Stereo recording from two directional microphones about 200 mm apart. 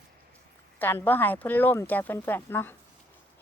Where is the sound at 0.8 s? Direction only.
10° left (ahead or behind).